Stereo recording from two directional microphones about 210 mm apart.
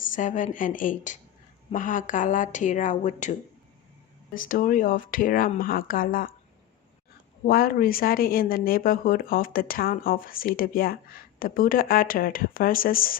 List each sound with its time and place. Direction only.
0.1 s speech: 35° left (ahead or behind)
4.4 s speech: 40° left (ahead or behind)
7.4 s speech: 45° left (ahead or behind)